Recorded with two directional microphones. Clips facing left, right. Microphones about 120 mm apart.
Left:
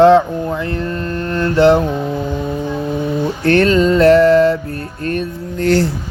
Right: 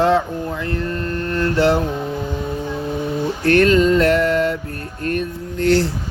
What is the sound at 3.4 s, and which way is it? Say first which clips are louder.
Mantra: left 1 dB; 30° left (ahead or behind).